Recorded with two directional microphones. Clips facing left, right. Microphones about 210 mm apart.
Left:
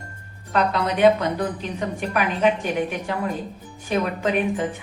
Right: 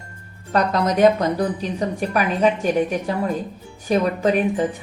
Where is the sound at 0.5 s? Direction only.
40° right (ahead or behind).